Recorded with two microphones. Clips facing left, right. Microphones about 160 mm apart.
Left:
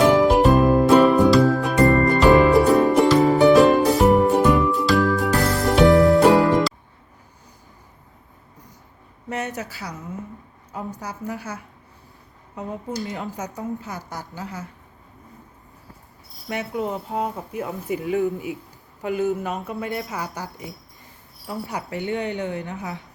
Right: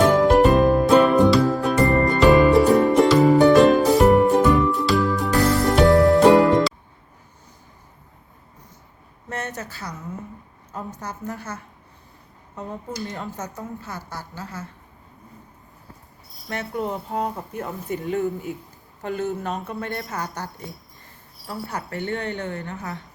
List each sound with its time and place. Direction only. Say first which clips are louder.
0.1 s music: even; 5° left (ahead or behind)
1.9 s music: left 2 dB; 20° right (ahead or behind)
2.1 s music: right 2 dB; centre (ahead or behind)
9.3 s a sound: left 3 dB; 10° left (ahead or behind)
10.7 s speech: left 1 dB; 10° left (ahead or behind)
13.1 s speech: left 2 dB; 15° left (ahead or behind)
16.5 s speech: left 1 dB; 10° left (ahead or behind)